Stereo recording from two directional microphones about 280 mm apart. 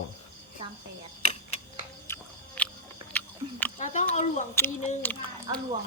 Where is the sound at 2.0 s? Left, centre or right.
Centre.